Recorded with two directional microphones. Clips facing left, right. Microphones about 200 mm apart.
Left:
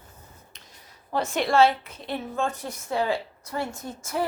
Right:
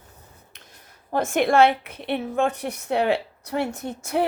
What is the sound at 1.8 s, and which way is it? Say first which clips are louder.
A woman's voice: right 5 dB; 65° right (ahead or behind).